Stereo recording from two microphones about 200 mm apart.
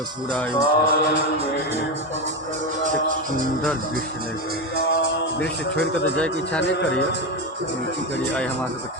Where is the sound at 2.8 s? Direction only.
40° right (ahead or behind).